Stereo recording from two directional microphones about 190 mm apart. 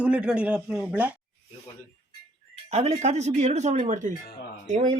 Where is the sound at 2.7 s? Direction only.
35° right (ahead or behind).